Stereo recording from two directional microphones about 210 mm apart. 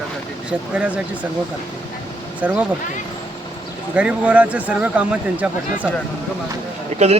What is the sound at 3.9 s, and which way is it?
Speech, 5° right (ahead or behind).